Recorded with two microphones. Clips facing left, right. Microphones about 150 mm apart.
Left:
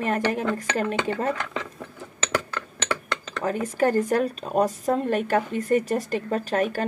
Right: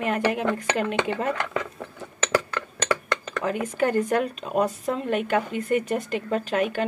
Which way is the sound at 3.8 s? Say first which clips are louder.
Left 1 dB; 40° left (ahead or behind).